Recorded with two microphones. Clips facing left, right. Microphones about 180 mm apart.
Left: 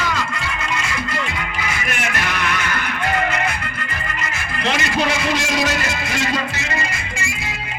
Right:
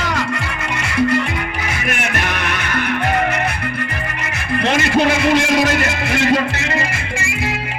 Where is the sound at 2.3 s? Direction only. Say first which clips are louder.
Right 1 dB; 55° right (ahead or behind).